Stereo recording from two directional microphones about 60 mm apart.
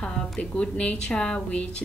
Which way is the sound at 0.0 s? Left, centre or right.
Centre.